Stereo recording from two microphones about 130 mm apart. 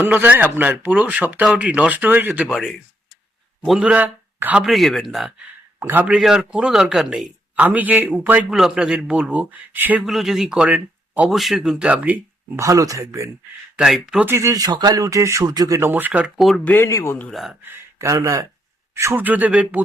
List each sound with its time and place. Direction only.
0.0 s a man's voice: 15° right (ahead or behind)
2.5 s speech: centre (ahead or behind)
3.8 s speech: 10° right (ahead or behind)
4.6 s speech: centre (ahead or behind)
5.8 s a man's voice: 15° right (ahead or behind)
6.1 s a man's voice: 5° right (ahead or behind)
10.1 s speech: centre (ahead or behind)
12.5 s speech: 25° right (ahead or behind)
13.7 s speech: 5° right (ahead or behind)
14.3 s speech: 20° right (ahead or behind)
15.8 s a man's voice: 15° right (ahead or behind)
16.6 s speech: 20° left (ahead or behind)
17.2 s speech: centre (ahead or behind)
17.6 s a man's voice: 20° right (ahead or behind)